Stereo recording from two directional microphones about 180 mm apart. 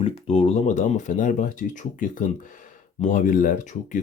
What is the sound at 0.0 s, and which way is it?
Speech, 35° left (ahead or behind).